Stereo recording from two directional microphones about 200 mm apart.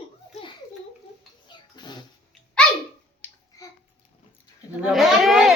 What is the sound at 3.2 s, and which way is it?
Finger snapping, 10° left (ahead or behind).